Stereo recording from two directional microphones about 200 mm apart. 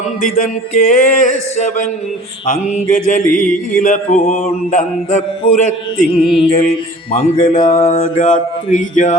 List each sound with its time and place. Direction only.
0.2 s mantra: 40° left (ahead or behind)
6.1 s music: 25° left (ahead or behind)
7.5 s mantra: 40° left (ahead or behind)